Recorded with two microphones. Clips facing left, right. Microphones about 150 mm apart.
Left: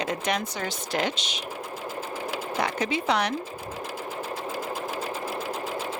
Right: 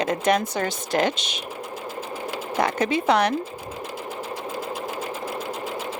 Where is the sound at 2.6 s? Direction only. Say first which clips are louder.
Right 6 dB; 50° right (ahead or behind).